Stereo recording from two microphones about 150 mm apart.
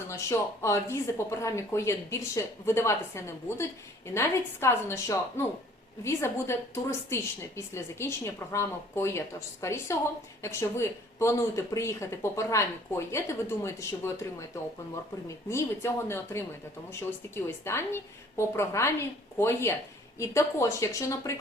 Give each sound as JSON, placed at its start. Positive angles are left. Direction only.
{"t": 0.1, "sound": "a woman's voice", "side_deg": 20}